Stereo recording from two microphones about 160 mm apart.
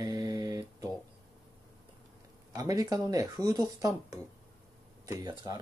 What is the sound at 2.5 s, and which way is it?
Speech, 20° right (ahead or behind).